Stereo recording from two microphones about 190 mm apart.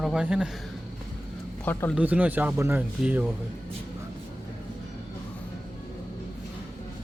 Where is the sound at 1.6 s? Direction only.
10° left (ahead or behind).